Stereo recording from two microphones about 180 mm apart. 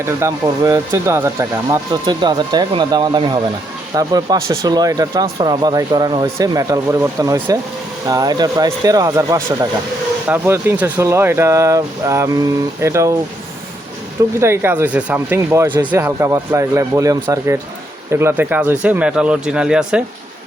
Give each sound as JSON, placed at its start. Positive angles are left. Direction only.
{"t": 0.0, "sound": "speech", "side_deg": -15}
{"t": 14.3, "sound": "speech", "side_deg": -15}